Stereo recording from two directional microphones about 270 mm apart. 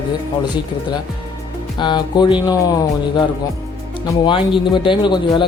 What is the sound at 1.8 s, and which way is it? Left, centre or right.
Speech, centre.